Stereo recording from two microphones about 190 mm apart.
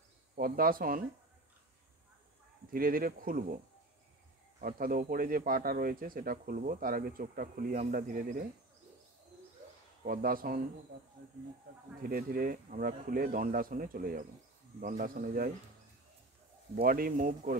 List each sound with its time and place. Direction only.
0.4 s speech: 50° right (ahead or behind)
2.7 s speech: 50° right (ahead or behind)
10.0 s speech: 50° right (ahead or behind)
12.0 s speech: 50° right (ahead or behind)
16.7 s speech: 50° right (ahead or behind)